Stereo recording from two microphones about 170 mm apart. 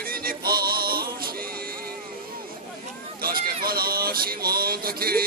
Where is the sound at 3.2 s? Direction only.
60° right (ahead or behind).